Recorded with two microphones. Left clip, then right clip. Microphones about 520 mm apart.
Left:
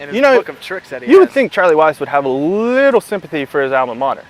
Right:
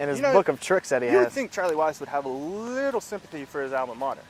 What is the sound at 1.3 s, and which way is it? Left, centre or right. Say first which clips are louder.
Speech: left 15 dB; left.